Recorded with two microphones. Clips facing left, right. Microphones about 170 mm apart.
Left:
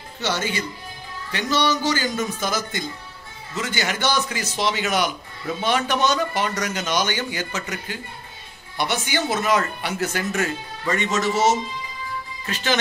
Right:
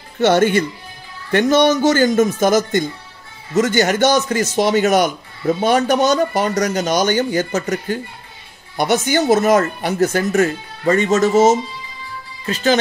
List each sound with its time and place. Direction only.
0.2 s a man's voice: 55° right (ahead or behind)